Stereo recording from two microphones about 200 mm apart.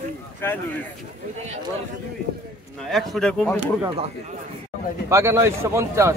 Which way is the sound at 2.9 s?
Centre (ahead or behind).